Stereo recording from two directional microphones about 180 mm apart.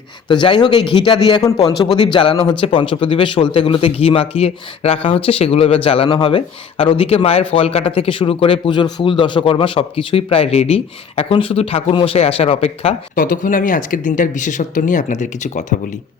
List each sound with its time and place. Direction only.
0.3 s speech: 25° left (ahead or behind)
13.1 s speech: 50° left (ahead or behind)